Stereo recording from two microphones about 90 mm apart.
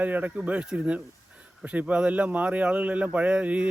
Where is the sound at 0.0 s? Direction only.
15° right (ahead or behind).